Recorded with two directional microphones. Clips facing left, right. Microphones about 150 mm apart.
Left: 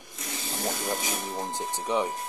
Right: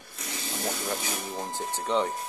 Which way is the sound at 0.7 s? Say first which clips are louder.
Left 2 dB; 10° left (ahead or behind).